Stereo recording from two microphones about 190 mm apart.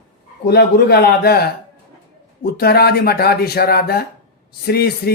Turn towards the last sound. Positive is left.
turn(degrees=55)  # may be behind; listen again after turning